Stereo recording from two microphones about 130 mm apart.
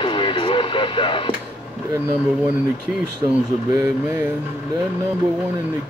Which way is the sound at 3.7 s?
25° right (ahead or behind).